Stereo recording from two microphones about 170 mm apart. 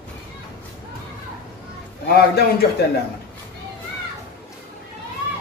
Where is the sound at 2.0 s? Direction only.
65° left (ahead or behind).